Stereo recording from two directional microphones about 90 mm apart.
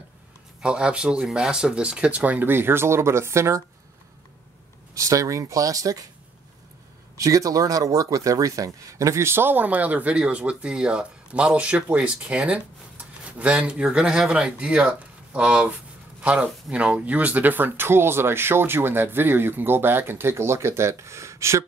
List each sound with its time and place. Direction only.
0.6 s speech: 10° right (ahead or behind); by 3.6 s 30° right (ahead or behind)
4.9 s speech: 35° right (ahead or behind)
7.2 s speech: 40° right (ahead or behind)